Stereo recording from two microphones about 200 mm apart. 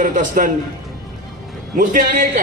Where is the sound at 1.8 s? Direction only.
45° right (ahead or behind).